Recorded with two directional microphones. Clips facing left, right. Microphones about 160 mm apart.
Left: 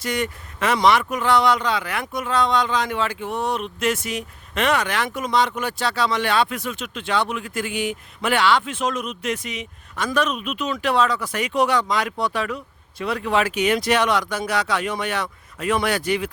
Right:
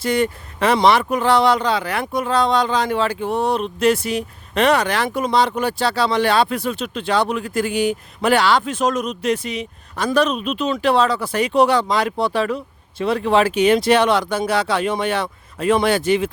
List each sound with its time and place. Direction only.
0.0 s speech: 30° right (ahead or behind)